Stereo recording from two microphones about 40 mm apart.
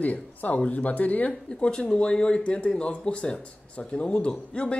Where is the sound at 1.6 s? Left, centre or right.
Left.